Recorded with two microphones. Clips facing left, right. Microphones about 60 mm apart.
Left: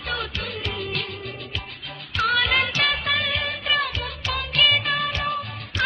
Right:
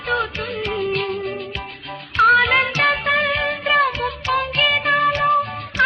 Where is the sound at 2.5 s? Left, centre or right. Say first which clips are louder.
Right 5 dB; right.